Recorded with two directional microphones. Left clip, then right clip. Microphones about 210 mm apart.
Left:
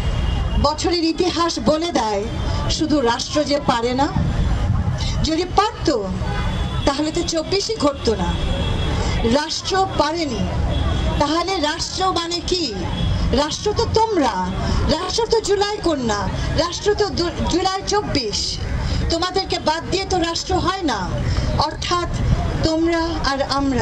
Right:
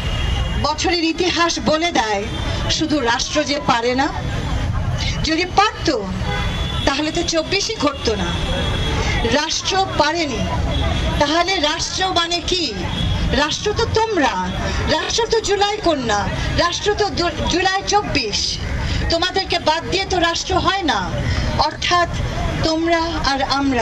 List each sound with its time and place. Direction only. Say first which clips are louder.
0.6 s speech: even; 60° left (ahead or behind)
5.2 s speech: right 2 dB; 55° left (ahead or behind)
9.3 s speech: even; 60° left (ahead or behind)
22.6 s speech: right 1 dB; 60° left (ahead or behind)